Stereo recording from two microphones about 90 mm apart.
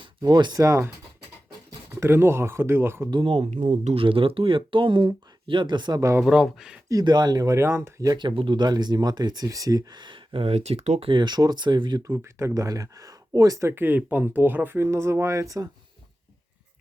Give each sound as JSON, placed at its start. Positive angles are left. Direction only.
{"t": 0.3, "sound": "speech", "side_deg": -50}
{"t": 0.6, "sound": "speech", "side_deg": -35}
{"t": 2.0, "sound": "speech", "side_deg": -25}
{"t": 3.1, "sound": "speech", "side_deg": -80}
{"t": 6.0, "sound": "speech", "side_deg": -35}
{"t": 6.2, "sound": "speech", "side_deg": -5}
{"t": 7.0, "sound": "speech", "side_deg": -50}
{"t": 8.0, "sound": "speech", "side_deg": -55}
{"t": 11.0, "sound": "speech", "side_deg": -60}
{"t": 12.0, "sound": "speech", "side_deg": -30}